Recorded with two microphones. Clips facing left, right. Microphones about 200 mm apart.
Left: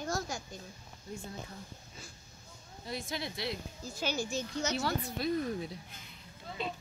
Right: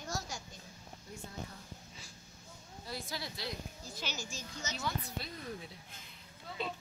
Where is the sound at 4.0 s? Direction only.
50° left (ahead or behind); by 5.0 s 70° left (ahead or behind).